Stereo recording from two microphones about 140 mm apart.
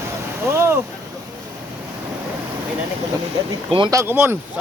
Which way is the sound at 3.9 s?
20° right (ahead or behind).